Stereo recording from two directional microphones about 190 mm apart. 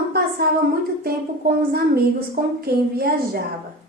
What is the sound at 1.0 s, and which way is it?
A woman's voice, 50° right (ahead or behind).